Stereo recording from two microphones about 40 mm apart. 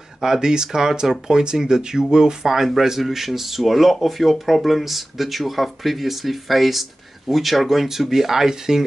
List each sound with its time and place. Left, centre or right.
0.2 s speech: centre